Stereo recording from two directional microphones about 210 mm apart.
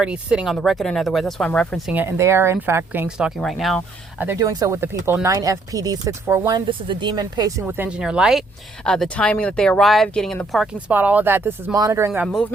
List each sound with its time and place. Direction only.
0.0 s speech: 5° right (ahead or behind)
2.0 s speech: 10° right (ahead or behind)
4.3 s speech: 15° right (ahead or behind)